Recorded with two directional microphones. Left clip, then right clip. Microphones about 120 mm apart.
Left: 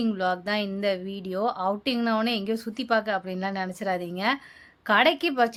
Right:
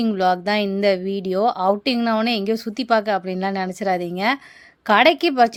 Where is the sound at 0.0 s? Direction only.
55° right (ahead or behind).